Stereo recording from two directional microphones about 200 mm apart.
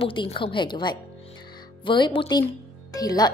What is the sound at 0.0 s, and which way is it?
A woman's voice, 25° left (ahead or behind).